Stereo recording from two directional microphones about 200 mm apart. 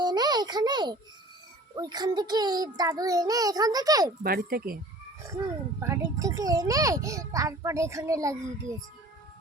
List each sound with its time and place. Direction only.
0.0 s music: 20° right (ahead or behind)
1.7 s a child's voice: 20° right (ahead or behind)
4.2 s speech: 50° right (ahead or behind)
5.8 s a child's voice: 15° right (ahead or behind)